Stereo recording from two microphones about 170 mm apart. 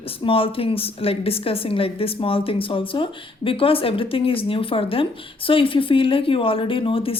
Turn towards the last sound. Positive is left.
turn(degrees=30)  # may be behind; listen again after turning